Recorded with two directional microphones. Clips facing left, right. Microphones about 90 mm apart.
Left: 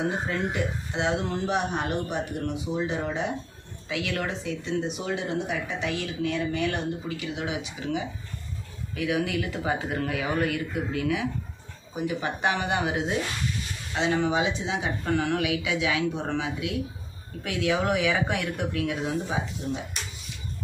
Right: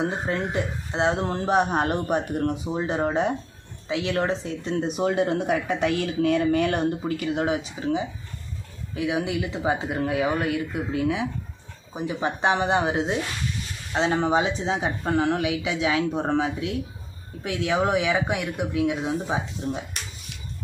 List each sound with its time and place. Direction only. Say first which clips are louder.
0.0 s speech: right 2 dB; 35° right (ahead or behind)
3.8 s speech: right 5 dB; 30° right (ahead or behind)
17.4 s speech: right 2 dB; 25° right (ahead or behind)
19.6 s speech: right 2 dB; 35° right (ahead or behind)